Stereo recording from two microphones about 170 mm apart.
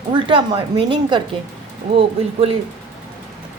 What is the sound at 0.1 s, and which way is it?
Speech, 30° right (ahead or behind).